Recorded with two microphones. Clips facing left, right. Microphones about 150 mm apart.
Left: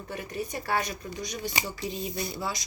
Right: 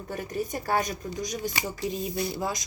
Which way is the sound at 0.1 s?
45° right (ahead or behind).